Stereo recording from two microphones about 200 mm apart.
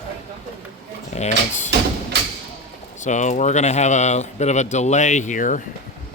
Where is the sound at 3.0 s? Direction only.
35° left (ahead or behind).